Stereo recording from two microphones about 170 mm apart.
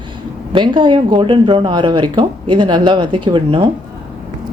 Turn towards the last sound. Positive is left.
turn(degrees=-30)  # may be behind; listen again after turning